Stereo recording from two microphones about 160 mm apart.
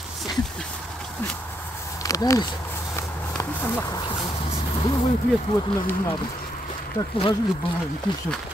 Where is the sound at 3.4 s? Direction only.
25° left (ahead or behind).